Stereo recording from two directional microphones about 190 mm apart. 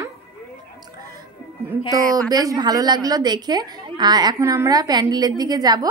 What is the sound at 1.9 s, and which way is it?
A woman's voice, 20° right (ahead or behind).